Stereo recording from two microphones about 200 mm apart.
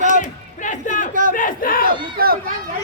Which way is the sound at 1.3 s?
45° left (ahead or behind).